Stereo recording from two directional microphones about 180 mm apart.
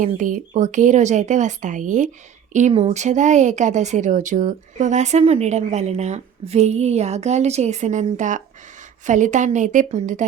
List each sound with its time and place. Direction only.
0.2 s speech: 45° right (ahead or behind)